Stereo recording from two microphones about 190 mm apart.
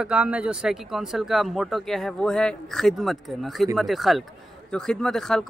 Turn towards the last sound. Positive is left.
turn(degrees=5)  # may be behind; listen again after turning